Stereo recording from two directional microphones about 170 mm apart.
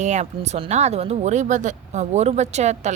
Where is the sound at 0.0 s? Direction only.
40° right (ahead or behind).